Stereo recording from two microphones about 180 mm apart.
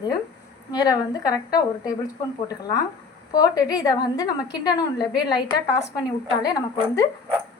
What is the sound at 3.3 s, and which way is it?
A woman's voice, 20° left (ahead or behind).